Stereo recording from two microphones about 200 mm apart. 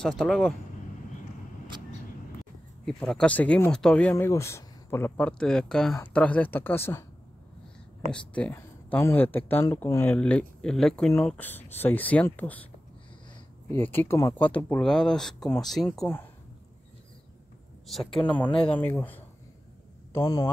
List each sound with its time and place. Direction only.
0.0 s speech: 5° left (ahead or behind)
2.8 s speech: centre (ahead or behind)
8.1 s speech: 5° left (ahead or behind)
13.7 s speech: 10° left (ahead or behind)
17.8 s a man's voice: centre (ahead or behind); by 20.4 s 20° left (ahead or behind)